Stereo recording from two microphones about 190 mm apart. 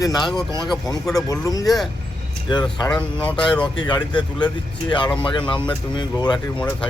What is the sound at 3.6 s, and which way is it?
Speech, 25° left (ahead or behind).